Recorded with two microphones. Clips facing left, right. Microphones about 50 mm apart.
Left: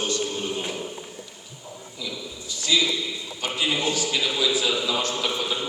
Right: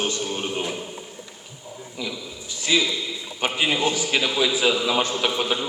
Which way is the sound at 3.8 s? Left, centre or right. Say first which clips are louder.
Right 2 dB; right.